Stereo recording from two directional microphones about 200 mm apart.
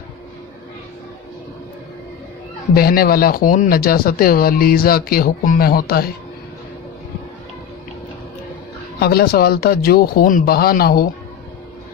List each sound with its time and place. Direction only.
2.7 s speech: 50° left (ahead or behind)
9.0 s speech: 50° left (ahead or behind)